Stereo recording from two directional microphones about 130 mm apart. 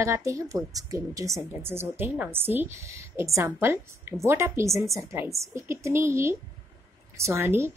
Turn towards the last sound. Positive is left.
turn(degrees=-20)  # may be behind; listen again after turning